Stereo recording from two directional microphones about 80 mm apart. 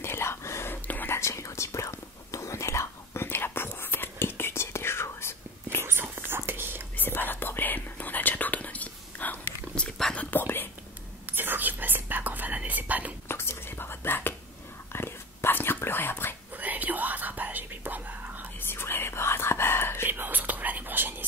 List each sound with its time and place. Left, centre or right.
0.0 s whispering: left
0.8 s whispering: left
1.1 s whispering: left
5.9 s whispering: right
7.0 s whispering: left
9.8 s whispering: centre
10.3 s whispering: left
11.3 s whispering: right
13.3 s whispering: left
16.5 s whispering: right
18.7 s whispering: left
20.1 s whispering: right